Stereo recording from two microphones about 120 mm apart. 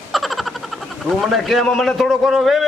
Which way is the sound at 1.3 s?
Centre (ahead or behind).